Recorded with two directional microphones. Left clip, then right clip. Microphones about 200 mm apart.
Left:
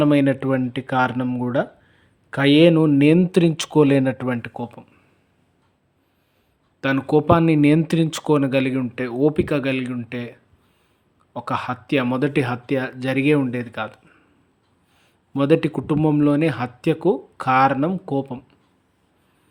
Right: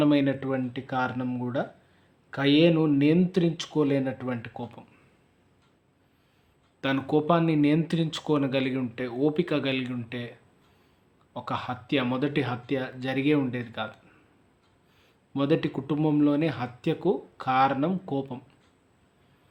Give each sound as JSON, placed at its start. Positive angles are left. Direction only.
{"t": 0.0, "sound": "speech", "side_deg": 40}
{"t": 6.8, "sound": "speech", "side_deg": 35}
{"t": 11.3, "sound": "speech", "side_deg": 35}
{"t": 15.3, "sound": "speech", "side_deg": 40}